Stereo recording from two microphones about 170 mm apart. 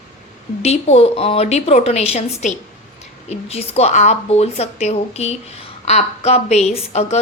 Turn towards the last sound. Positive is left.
turn(degrees=35)  # may be behind; listen again after turning